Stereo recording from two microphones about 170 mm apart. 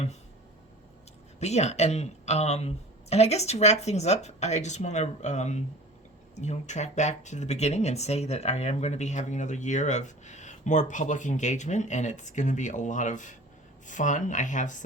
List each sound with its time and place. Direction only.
1.4 s speech: 40° left (ahead or behind)